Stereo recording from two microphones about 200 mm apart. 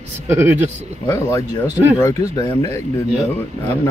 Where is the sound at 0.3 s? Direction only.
10° right (ahead or behind).